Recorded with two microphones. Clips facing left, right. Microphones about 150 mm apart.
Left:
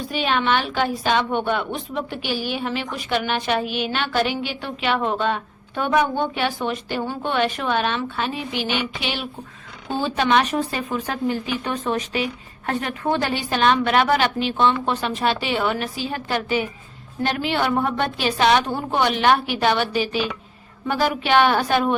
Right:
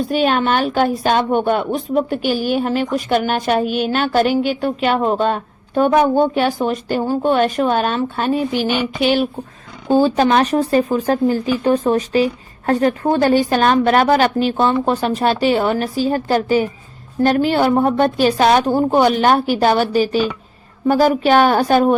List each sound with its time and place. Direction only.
0.1 s a woman's voice: 45° right (ahead or behind)